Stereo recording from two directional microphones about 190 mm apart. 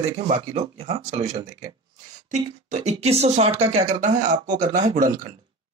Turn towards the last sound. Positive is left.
turn(degrees=-40)  # may be behind; listen again after turning